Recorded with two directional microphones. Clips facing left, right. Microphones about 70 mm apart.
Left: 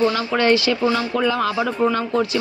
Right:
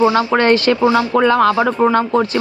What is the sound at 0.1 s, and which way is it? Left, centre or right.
Speech, right.